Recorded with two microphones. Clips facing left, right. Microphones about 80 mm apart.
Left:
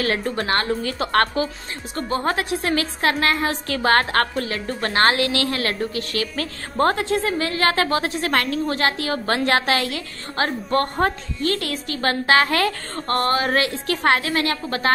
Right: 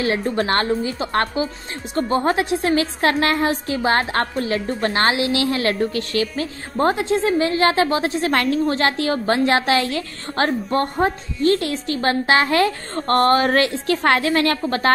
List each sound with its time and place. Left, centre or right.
0.0 s speech: right
0.4 s a woman's voice: right
0.8 s a woman's voice: centre
2.0 s speech: right
3.4 s speech: centre
4.9 s a woman's voice: left
5.2 s a woman's voice: right
6.3 s speech: centre; by 10.5 s right
10.7 s a woman's voice: centre
11.4 s speech: right
13.0 s a woman's voice: right